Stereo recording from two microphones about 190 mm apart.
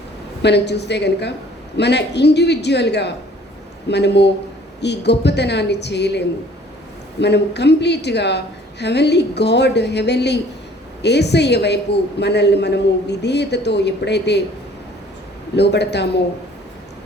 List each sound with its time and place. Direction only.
0.4 s a woman's voice: 65° left (ahead or behind)
15.5 s a woman's voice: 60° left (ahead or behind)